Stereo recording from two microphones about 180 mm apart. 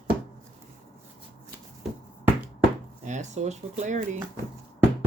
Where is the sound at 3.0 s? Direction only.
40° right (ahead or behind).